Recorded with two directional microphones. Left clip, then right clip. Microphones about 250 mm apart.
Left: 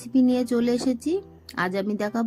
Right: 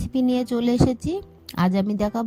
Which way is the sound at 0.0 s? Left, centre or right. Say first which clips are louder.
Left 1 dB; right.